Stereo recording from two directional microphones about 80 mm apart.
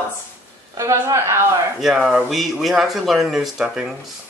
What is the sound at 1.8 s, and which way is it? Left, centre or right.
Speech, centre.